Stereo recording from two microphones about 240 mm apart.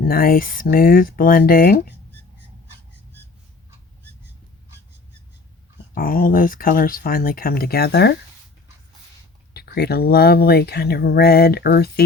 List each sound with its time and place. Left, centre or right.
0.0 s speech: left
5.9 s speech: left
9.5 s speech: left